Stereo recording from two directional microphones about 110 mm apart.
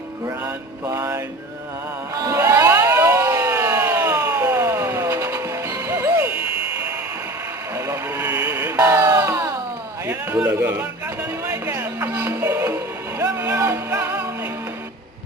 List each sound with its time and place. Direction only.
0.4 s mantra: 30° right (ahead or behind)
2.2 s a sound: 30° right (ahead or behind)
6.3 s a sound: 55° left (ahead or behind)
8.6 s music: 30° right (ahead or behind)
10.3 s a man's voice: 10° right (ahead or behind)
11.6 s music: 25° right (ahead or behind)